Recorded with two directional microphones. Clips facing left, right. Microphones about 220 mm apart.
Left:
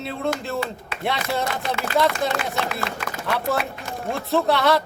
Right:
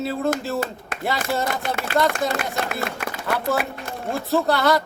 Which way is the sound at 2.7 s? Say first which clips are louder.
Right 1 dB; 50° right (ahead or behind).